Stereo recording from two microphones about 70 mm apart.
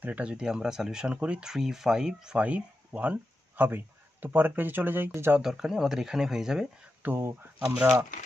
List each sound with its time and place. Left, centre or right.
0.0 s speech: centre
5.4 s speech: centre
7.0 s speech: right
7.8 s speech: right